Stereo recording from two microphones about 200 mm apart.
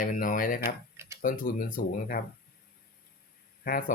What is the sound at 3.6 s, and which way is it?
Speech, 45° left (ahead or behind).